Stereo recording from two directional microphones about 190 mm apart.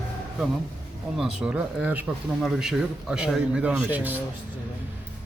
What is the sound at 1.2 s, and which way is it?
Speech, 5° right (ahead or behind).